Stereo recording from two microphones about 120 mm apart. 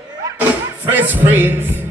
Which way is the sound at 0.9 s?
15° right (ahead or behind).